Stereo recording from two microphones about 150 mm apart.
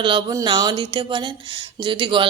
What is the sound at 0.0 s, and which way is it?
A woman's voice, 30° right (ahead or behind).